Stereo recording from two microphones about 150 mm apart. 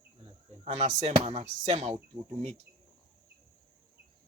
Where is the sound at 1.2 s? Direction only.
45° right (ahead or behind).